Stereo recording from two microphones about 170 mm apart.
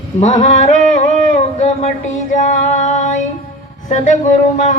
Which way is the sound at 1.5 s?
40° left (ahead or behind).